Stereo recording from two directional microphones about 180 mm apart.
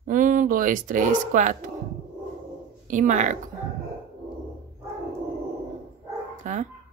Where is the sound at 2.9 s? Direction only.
45° right (ahead or behind).